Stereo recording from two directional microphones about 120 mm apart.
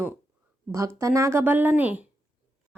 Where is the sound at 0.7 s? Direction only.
25° right (ahead or behind).